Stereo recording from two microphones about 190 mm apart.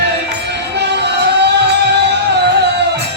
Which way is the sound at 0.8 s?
60° right (ahead or behind).